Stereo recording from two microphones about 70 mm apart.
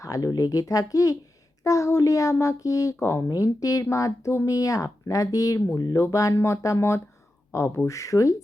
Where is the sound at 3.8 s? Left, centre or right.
Left.